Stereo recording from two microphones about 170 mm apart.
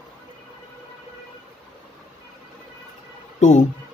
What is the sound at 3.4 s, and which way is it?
Speech, 45° left (ahead or behind).